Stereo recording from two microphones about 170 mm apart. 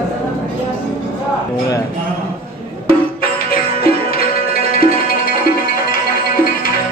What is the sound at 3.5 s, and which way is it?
Music, 60° left (ahead or behind).